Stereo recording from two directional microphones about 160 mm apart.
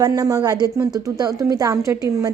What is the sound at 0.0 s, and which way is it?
A woman's voice, 25° right (ahead or behind).